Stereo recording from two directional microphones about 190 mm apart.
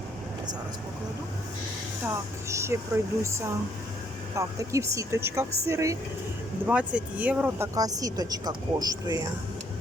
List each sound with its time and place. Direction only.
2.5 s speech: 15° right (ahead or behind)
7.8 s speech: 20° right (ahead or behind)